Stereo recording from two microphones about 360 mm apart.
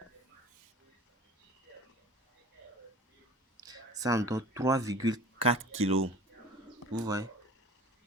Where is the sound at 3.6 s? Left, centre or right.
Centre.